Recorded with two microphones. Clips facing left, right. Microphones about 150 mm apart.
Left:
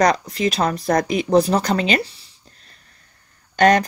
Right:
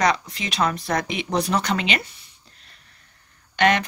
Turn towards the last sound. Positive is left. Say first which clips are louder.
# left 5 dB
turn(degrees=40)  # may be behind; listen again after turning